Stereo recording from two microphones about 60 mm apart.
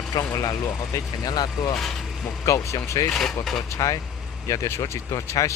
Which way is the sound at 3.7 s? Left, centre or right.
Left.